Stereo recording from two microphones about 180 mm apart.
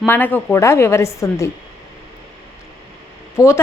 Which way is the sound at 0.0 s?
10° left (ahead or behind).